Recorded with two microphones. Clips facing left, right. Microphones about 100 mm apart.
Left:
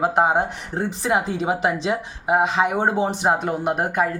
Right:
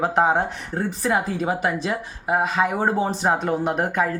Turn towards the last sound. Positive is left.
turn(degrees=15)  # may be behind; listen again after turning